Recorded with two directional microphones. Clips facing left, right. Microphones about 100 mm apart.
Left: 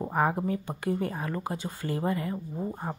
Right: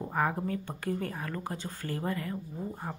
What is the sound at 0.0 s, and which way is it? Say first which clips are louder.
Speech: left 4 dB; 25° left (ahead or behind).